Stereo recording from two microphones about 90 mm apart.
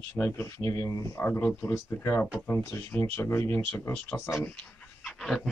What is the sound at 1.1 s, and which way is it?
Speech, 25° left (ahead or behind).